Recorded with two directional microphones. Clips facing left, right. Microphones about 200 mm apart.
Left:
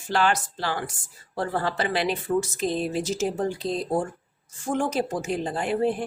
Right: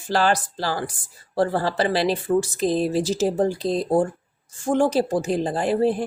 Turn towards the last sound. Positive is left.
turn(degrees=-35)  # may be behind; listen again after turning